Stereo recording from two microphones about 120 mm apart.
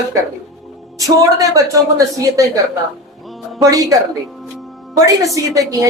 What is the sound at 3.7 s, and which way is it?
A woman's voice, 30° right (ahead or behind).